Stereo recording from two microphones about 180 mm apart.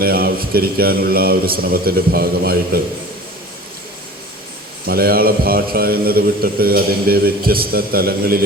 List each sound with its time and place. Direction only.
0.0 s a man's voice: 55° right (ahead or behind)
4.9 s a man's voice: 55° right (ahead or behind)